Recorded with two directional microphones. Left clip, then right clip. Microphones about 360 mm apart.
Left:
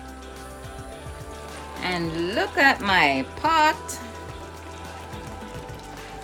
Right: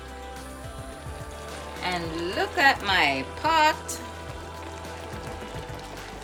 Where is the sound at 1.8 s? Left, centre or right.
Left.